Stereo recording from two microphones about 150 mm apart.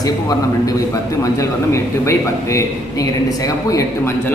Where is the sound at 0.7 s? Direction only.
20° left (ahead or behind).